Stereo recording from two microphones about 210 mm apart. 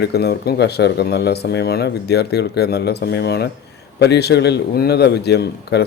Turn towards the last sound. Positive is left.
turn(degrees=50)  # may be behind; listen again after turning